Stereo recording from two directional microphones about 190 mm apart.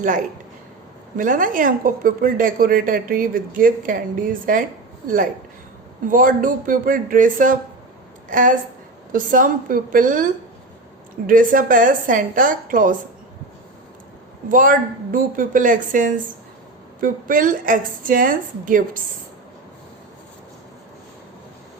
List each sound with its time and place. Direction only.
0.0 s a woman's voice: 45° right (ahead or behind)
11.3 s speech: 45° right (ahead or behind)
14.5 s speech: 45° right (ahead or behind)